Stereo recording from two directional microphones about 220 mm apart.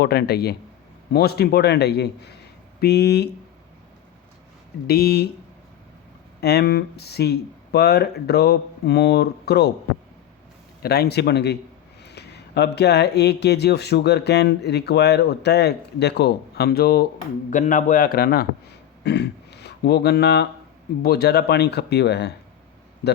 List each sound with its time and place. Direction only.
0.0 s speech: 45° left (ahead or behind)
4.9 s speech: 45° left (ahead or behind)
6.4 s speech: 50° left (ahead or behind)
10.8 s a man's voice: 45° left (ahead or behind)